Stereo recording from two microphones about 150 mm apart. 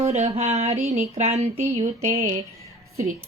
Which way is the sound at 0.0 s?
45° right (ahead or behind).